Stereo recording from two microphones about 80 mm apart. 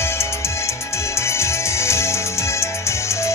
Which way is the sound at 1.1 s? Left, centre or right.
Left.